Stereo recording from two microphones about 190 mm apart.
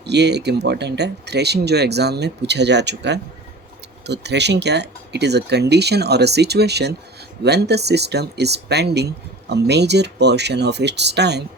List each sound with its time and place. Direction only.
0.0 s speech: 60° right (ahead or behind)